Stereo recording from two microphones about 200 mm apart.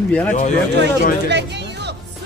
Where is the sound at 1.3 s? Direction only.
60° right (ahead or behind).